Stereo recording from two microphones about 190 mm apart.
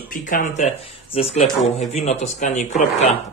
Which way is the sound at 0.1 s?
45° left (ahead or behind).